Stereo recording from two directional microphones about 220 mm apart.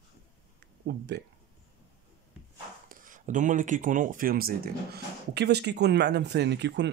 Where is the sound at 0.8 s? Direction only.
50° right (ahead or behind).